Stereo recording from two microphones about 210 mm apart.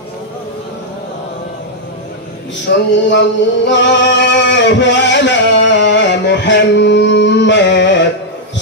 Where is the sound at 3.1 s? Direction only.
60° left (ahead or behind).